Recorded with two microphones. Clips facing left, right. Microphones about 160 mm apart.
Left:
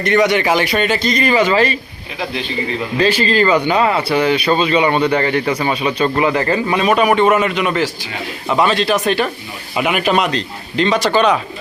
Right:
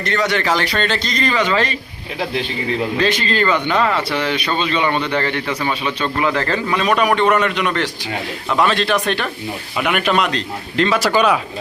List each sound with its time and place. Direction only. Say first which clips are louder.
0.0 s speech: left 5 dB; 15° left (ahead or behind)
3.0 s a man's voice: left 6 dB; 35° left (ahead or behind)
3.3 s speech: left 3 dB; 10° left (ahead or behind)
4.2 s a man's voice: left 6 dB; 35° left (ahead or behind)
4.6 s speech: left 3 dB; 10° left (ahead or behind)
4.9 s a man's voice: left 5 dB; 40° left (ahead or behind)
6.2 s a man's voice: left 3 dB; 15° left (ahead or behind); by 11.3 s 5° right (ahead or behind)